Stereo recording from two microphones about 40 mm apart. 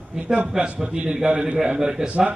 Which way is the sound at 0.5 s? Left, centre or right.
Right.